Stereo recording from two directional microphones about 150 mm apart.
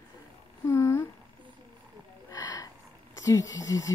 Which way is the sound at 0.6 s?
20° left (ahead or behind).